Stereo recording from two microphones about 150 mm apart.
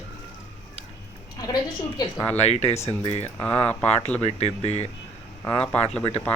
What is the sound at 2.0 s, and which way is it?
Speech, 15° left (ahead or behind).